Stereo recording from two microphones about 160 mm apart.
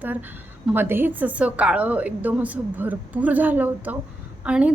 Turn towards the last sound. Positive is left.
turn(degrees=-5)  # may be behind; listen again after turning